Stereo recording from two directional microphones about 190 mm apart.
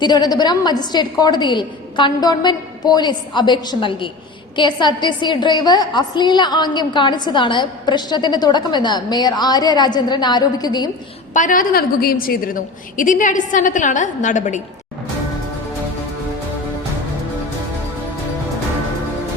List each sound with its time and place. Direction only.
0.0 s a woman's voice: 20° left (ahead or behind)
11.3 s a woman's voice: 45° left (ahead or behind)